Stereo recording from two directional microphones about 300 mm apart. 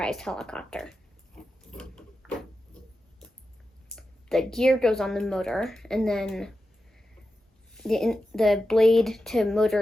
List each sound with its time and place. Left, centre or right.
0.0 s a woman's voice: centre
1.4 s pig: centre
3.9 s a woman's voice: centre
7.7 s a woman's voice: centre